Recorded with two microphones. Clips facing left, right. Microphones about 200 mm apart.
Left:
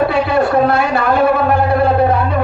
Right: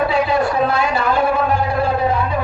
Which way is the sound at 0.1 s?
55° left (ahead or behind).